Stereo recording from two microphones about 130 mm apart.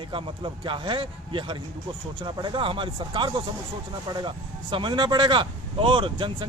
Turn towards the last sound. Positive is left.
turn(degrees=-40)  # may be behind; listen again after turning